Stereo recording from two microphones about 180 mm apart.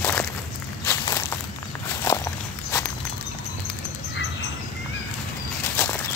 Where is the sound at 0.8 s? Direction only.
15° left (ahead or behind).